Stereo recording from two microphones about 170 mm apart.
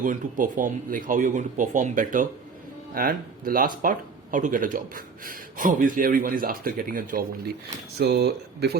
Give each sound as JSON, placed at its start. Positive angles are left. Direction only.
{"t": 0.0, "sound": "speech", "side_deg": -50}
{"t": 7.9, "sound": "speech", "side_deg": -70}